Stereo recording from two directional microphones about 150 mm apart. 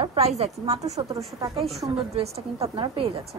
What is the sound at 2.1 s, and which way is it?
Speech, 45° right (ahead or behind).